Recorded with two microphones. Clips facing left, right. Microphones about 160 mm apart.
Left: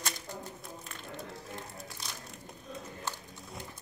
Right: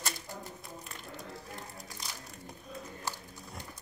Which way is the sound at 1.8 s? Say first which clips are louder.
Left 1 dB; centre (ahead or behind).